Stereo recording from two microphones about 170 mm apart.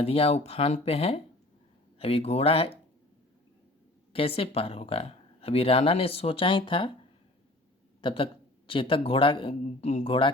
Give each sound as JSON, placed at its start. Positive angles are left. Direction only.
{"t": 0.0, "sound": "speech", "side_deg": 35}
{"t": 4.1, "sound": "speech", "side_deg": 35}
{"t": 8.0, "sound": "speech", "side_deg": 30}